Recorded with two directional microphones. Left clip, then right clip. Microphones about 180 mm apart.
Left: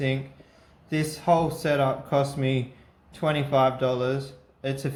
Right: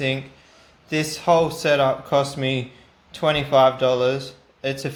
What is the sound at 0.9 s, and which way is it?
Speech, 10° right (ahead or behind).